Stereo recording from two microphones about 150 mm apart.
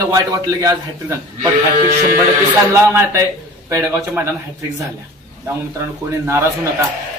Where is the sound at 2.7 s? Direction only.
20° right (ahead or behind).